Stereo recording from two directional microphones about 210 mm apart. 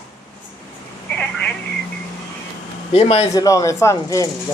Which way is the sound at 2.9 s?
30° left (ahead or behind).